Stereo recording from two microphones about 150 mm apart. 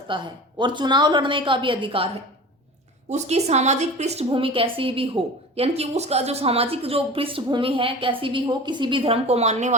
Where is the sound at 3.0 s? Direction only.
50° right (ahead or behind).